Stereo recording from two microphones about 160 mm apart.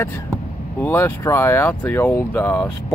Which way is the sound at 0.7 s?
10° left (ahead or behind).